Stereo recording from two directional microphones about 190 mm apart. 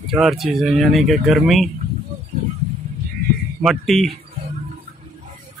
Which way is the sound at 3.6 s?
Centre (ahead or behind).